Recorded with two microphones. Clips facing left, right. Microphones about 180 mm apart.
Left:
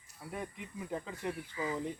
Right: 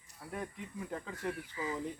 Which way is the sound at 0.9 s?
5° left (ahead or behind).